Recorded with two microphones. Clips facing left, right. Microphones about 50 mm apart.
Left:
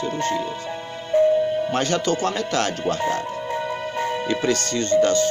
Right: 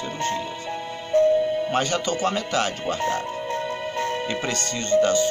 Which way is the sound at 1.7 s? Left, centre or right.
Centre.